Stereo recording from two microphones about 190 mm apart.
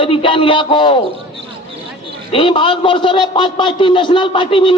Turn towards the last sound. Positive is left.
turn(degrees=25)  # may be behind; listen again after turning